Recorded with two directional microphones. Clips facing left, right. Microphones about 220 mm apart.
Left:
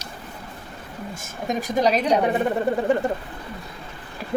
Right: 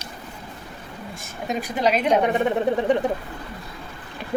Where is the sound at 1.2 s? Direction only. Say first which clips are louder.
Left 1 dB; 45° left (ahead or behind).